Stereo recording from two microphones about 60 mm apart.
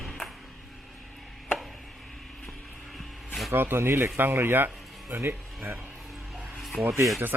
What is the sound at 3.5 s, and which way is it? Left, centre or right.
Speech, right.